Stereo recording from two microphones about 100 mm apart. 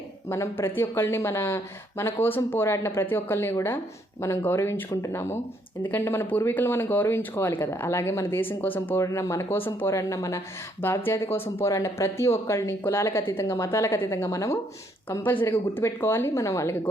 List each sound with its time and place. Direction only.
0.3 s speech: 25° left (ahead or behind)
9.0 s speech: 30° left (ahead or behind)
10.8 s speech: 20° left (ahead or behind)
15.1 s speech: 20° left (ahead or behind)